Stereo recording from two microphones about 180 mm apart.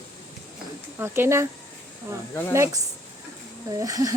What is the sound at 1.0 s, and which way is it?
Speech, 15° right (ahead or behind).